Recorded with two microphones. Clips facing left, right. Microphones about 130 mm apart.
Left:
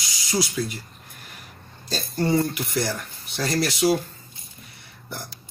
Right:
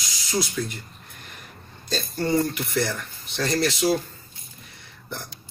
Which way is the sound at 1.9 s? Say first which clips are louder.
Left 1 dB; 10° left (ahead or behind).